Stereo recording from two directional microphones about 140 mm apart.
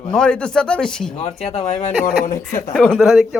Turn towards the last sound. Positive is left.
turn(degrees=0)  # may be behind; listen again after turning